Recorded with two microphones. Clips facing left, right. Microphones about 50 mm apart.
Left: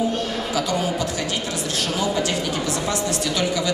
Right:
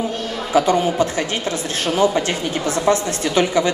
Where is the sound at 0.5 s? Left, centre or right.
Right.